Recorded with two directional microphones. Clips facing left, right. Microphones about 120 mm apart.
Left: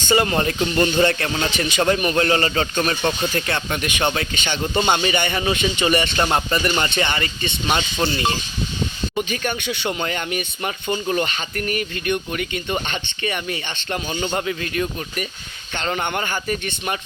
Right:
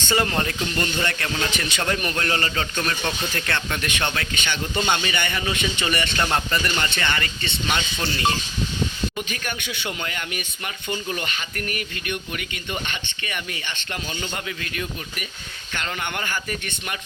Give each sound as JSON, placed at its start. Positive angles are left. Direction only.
{"t": 0.1, "sound": "speech", "side_deg": 15}
{"t": 0.9, "sound": "speech", "side_deg": 30}